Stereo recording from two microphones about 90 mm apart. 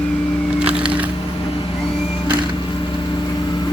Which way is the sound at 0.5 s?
10° right (ahead or behind).